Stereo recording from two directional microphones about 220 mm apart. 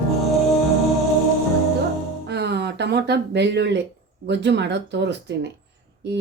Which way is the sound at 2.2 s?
50° right (ahead or behind).